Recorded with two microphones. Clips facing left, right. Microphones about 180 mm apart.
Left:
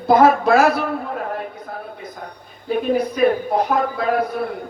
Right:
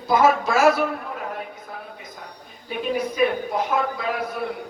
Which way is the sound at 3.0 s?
45° left (ahead or behind).